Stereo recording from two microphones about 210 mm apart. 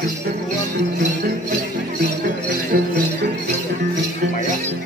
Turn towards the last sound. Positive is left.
turn(degrees=-50)  # may be behind; listen again after turning